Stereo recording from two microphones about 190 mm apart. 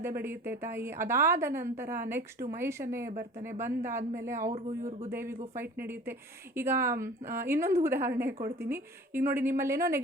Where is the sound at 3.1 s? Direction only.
45° right (ahead or behind).